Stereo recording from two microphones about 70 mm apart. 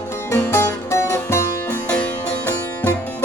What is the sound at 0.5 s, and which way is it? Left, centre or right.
Music, left.